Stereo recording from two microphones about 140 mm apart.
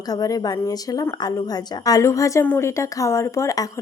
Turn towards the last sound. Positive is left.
turn(degrees=25)  # may be behind; listen again after turning